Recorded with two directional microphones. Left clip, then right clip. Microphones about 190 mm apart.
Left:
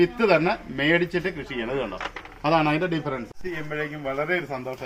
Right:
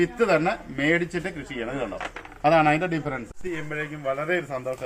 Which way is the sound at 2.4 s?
45° right (ahead or behind).